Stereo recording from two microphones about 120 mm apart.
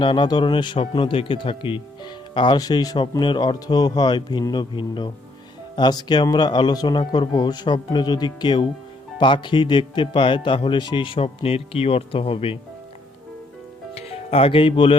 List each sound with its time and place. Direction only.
0.0 s speech: 40° left (ahead or behind)
13.9 s speech: 55° left (ahead or behind)